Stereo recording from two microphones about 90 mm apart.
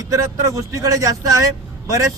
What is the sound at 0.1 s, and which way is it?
A man's voice, 40° right (ahead or behind).